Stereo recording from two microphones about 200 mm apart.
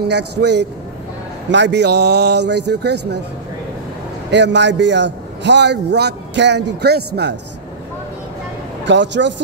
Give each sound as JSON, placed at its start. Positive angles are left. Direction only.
{"t": 0.0, "sound": "a man's voice", "side_deg": -55}
{"t": 4.3, "sound": "a man's voice", "side_deg": -60}
{"t": 8.8, "sound": "a man's voice", "side_deg": -65}